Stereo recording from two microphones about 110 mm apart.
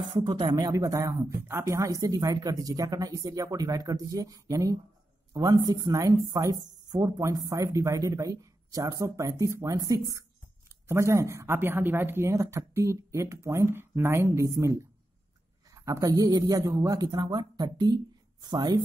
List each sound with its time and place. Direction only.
0.0 s speech: 40° right (ahead or behind)
0.7 s a woman's voice: 30° right (ahead or behind)